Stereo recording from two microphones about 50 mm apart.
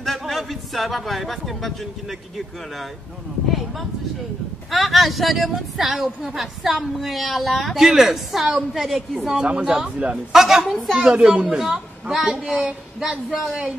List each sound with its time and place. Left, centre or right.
0.0 s a sound: centre
4.6 s a woman's voice: centre
9.4 s speech: centre
10.3 s a woman's voice: centre
11.0 s speech: centre